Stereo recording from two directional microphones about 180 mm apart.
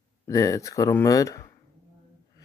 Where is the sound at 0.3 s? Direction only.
20° left (ahead or behind).